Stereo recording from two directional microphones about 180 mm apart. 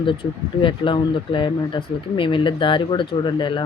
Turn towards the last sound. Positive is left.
turn(degrees=25)  # may be behind; listen again after turning